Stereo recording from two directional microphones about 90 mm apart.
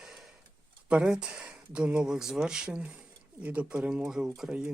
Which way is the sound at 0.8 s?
10° right (ahead or behind).